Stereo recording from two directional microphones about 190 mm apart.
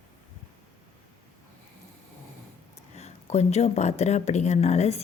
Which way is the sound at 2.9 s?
35° left (ahead or behind).